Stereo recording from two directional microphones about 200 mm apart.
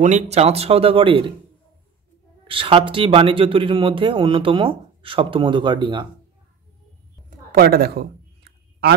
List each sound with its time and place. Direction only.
0.0 s speech: 35° right (ahead or behind)
2.4 s speech: 25° right (ahead or behind)
7.2 s a sound: 50° right (ahead or behind)